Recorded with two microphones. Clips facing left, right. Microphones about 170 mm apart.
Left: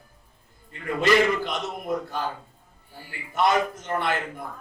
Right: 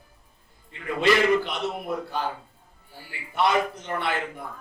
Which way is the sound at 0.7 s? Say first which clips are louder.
Even; 45° left (ahead or behind).